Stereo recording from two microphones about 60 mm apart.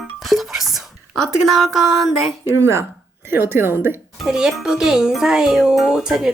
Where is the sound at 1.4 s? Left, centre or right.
Centre.